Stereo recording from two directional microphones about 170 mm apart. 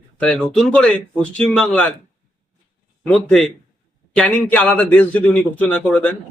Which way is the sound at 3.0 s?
5° left (ahead or behind).